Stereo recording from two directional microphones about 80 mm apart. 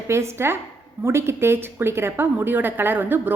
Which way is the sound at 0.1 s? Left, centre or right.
Right.